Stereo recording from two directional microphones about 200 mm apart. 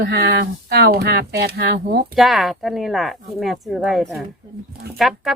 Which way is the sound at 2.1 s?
Centre (ahead or behind).